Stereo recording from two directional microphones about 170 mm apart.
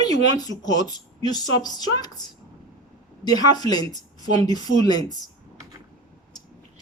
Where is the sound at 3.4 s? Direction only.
25° left (ahead or behind).